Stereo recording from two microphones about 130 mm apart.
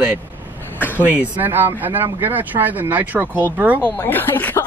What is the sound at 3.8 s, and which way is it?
Speech, 15° left (ahead or behind).